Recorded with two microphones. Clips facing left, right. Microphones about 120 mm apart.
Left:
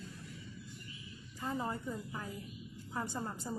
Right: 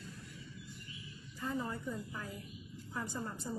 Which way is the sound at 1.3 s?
25° left (ahead or behind).